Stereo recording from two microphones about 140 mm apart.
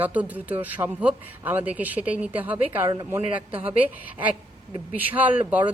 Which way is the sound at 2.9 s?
25° right (ahead or behind).